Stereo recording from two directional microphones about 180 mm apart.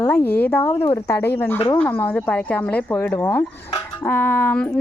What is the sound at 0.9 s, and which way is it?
Speech, 15° left (ahead or behind).